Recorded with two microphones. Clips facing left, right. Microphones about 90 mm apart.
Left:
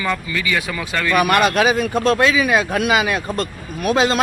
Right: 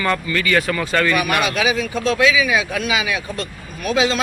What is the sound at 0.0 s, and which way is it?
Speech, 5° left (ahead or behind).